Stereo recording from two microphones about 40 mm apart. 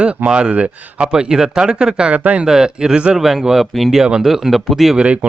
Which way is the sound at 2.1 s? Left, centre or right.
Right.